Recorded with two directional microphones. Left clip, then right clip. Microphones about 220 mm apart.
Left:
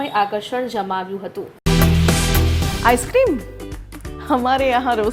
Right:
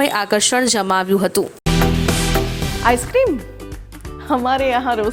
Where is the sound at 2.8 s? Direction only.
Centre (ahead or behind).